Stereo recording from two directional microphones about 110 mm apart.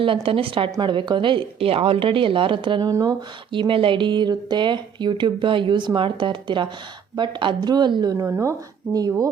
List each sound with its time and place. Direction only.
0.0 s speech: 55° right (ahead or behind)
2.9 s a woman's voice: 35° right (ahead or behind)
3.5 s a woman's voice: 50° right (ahead or behind)
8.3 s a woman's voice: 25° right (ahead or behind)